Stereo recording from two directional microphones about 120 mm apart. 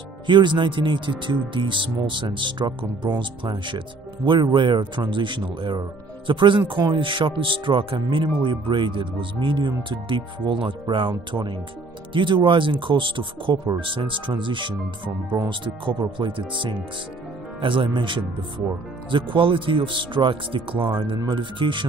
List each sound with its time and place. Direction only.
0.3 s speech: 40° right (ahead or behind)